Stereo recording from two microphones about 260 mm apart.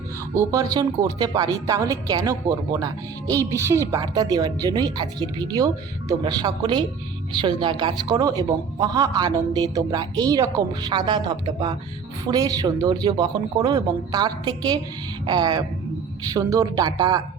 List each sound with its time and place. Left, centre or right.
0.3 s a woman's voice: centre